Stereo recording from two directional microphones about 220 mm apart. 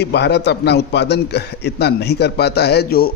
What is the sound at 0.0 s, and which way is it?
Speech, 50° left (ahead or behind).